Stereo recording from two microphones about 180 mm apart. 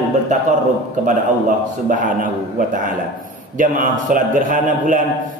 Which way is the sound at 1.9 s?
45° right (ahead or behind).